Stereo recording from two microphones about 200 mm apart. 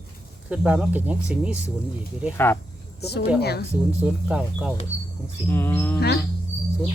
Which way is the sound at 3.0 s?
55° left (ahead or behind).